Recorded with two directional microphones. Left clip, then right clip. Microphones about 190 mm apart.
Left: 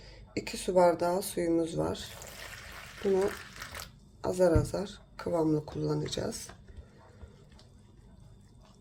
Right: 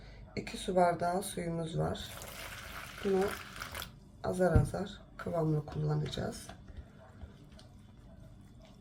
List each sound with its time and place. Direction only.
0.3 s speech: 40° left (ahead or behind)
2.1 s water: centre (ahead or behind)
3.2 s a sound: centre (ahead or behind)
4.2 s speech: 40° left (ahead or behind)